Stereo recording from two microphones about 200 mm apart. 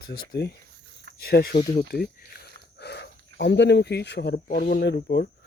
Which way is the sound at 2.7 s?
55° left (ahead or behind).